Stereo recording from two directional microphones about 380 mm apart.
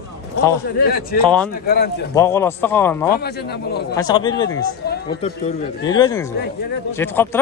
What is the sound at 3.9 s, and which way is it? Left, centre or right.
A man's voice, centre.